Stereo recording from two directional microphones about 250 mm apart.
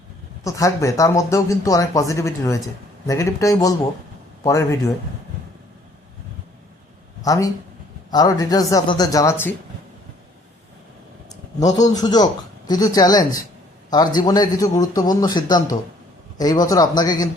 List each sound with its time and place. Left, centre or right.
0.4 s speech: centre
7.2 s speech: centre
11.6 s speech: centre